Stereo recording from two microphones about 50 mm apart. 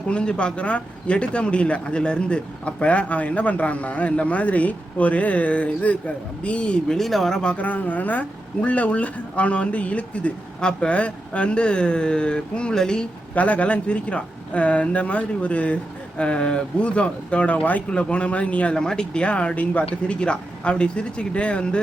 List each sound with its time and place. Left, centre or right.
0.1 s speech: left
6.9 s speech: centre
7.4 s speech: left; by 13.1 s centre
13.3 s speech: left